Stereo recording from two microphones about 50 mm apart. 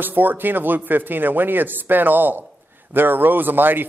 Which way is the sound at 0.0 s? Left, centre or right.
Right.